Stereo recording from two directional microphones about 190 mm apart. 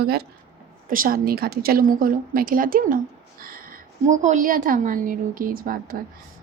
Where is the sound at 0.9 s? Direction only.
45° right (ahead or behind).